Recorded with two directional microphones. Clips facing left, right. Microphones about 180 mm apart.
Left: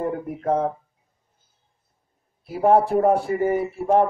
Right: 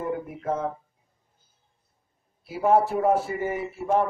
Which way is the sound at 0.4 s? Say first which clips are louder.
Left 8 dB; 40° left (ahead or behind).